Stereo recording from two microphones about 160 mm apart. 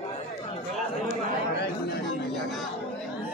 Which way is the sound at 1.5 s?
90° left.